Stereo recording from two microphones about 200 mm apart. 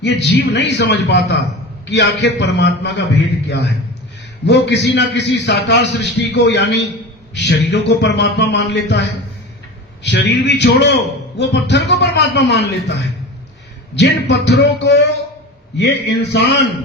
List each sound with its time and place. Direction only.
0.0 s a man's voice: 60° left (ahead or behind)